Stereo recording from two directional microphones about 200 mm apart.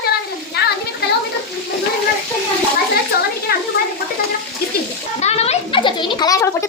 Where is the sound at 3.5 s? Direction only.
50° left (ahead or behind).